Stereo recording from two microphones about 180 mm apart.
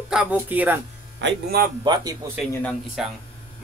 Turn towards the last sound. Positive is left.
turn(degrees=-5)  # may be behind; listen again after turning